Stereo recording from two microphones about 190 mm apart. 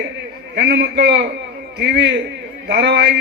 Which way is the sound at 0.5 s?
60° right (ahead or behind).